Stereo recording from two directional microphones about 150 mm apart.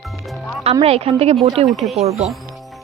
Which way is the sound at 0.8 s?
40° right (ahead or behind).